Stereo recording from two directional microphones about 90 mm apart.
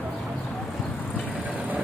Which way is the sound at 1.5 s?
15° right (ahead or behind).